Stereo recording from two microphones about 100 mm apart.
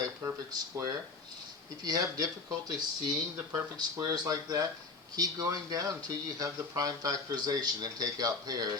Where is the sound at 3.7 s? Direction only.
40° right (ahead or behind).